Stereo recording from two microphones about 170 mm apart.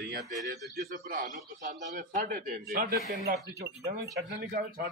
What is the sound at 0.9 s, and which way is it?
A child's voice, 55° right (ahead or behind).